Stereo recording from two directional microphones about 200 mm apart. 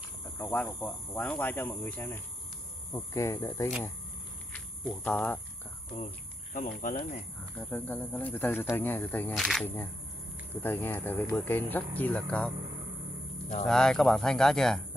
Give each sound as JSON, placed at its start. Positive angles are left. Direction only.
{"t": 0.4, "sound": "speech", "side_deg": 10}
{"t": 4.5, "sound": "a sound", "side_deg": 5}
{"t": 6.5, "sound": "speech", "side_deg": 40}
{"t": 7.5, "sound": "speech", "side_deg": 10}
{"t": 10.5, "sound": "speech", "side_deg": 10}
{"t": 13.7, "sound": "speech", "side_deg": 5}